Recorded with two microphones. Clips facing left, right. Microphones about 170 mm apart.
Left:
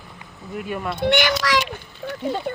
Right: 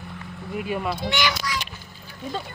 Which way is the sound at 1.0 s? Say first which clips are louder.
Left 6 dB; 60° left (ahead or behind).